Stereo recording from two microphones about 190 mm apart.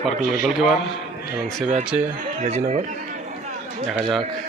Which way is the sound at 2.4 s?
35° right (ahead or behind).